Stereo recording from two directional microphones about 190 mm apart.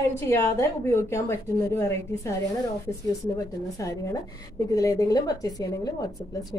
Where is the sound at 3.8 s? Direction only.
15° left (ahead or behind).